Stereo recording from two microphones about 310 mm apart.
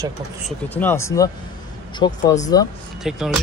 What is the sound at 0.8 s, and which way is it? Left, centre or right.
Speech, centre.